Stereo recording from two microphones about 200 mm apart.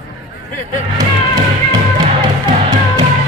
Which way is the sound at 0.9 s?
20° right (ahead or behind).